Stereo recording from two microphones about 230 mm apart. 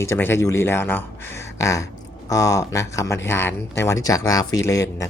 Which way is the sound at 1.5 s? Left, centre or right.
Centre.